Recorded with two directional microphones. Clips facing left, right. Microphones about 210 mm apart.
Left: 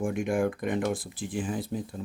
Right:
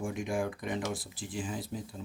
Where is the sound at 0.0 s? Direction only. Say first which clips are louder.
Left 6 dB; 55° left (ahead or behind).